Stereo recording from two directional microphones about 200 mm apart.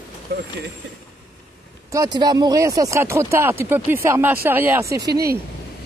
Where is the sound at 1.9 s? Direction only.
20° right (ahead or behind).